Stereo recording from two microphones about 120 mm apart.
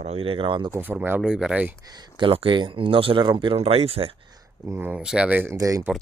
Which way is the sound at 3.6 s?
55° right (ahead or behind).